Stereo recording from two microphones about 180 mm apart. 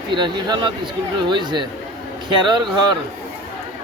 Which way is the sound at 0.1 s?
25° right (ahead or behind).